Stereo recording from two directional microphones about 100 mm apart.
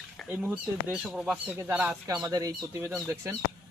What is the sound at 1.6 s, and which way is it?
Speech, 15° right (ahead or behind).